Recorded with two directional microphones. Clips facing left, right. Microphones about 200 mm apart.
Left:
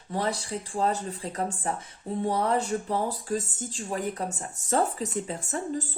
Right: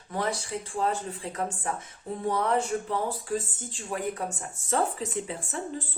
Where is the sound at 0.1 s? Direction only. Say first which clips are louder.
Left 1 dB; 35° left (ahead or behind).